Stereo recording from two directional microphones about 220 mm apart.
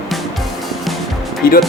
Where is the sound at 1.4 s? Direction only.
45° left (ahead or behind).